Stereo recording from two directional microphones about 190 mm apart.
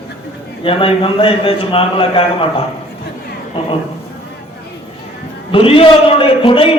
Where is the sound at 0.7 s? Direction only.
30° left (ahead or behind).